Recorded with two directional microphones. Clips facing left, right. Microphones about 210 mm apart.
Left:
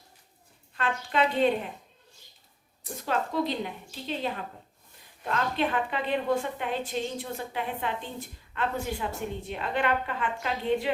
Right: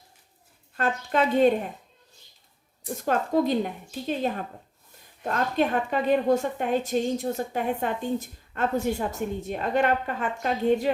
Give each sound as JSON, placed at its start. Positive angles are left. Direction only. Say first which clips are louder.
{"t": 0.8, "sound": "a woman's voice", "louder": "right 3 dB", "side_deg": -45}
{"t": 3.0, "sound": "a woman's voice", "louder": "right 5 dB", "side_deg": -45}